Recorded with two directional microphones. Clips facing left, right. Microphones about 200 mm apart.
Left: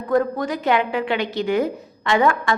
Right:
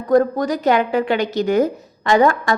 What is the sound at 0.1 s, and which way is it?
A woman's voice, 40° right (ahead or behind).